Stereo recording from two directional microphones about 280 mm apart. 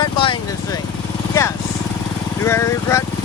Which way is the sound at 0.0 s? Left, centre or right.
Centre.